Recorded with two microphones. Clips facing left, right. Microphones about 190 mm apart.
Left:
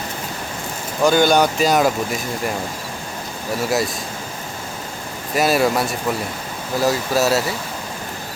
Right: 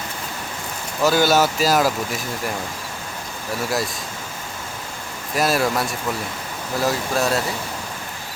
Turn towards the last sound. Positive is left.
turn(degrees=5)  # may be behind; listen again after turning